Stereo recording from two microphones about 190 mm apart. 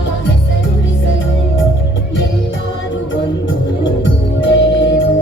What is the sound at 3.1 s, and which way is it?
Music, 75° left (ahead or behind).